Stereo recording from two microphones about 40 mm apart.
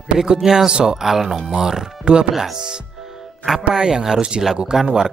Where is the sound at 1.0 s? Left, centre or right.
Centre; by 2.3 s right.